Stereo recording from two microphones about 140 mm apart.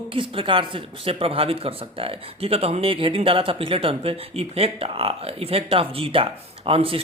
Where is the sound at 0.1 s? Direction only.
40° right (ahead or behind).